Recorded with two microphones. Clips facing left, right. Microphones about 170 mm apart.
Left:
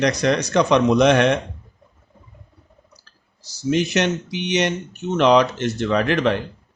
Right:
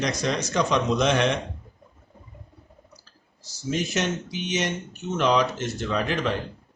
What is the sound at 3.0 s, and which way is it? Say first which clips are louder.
Speech: right 1 dB; 75° left (ahead or behind).